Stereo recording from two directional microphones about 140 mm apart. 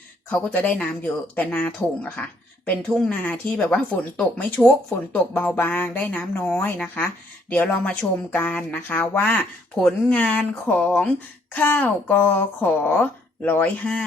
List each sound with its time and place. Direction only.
0.3 s speech: 10° left (ahead or behind)